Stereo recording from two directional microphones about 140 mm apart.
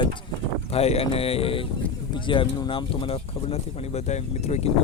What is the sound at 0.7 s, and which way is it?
Speech, 45° left (ahead or behind).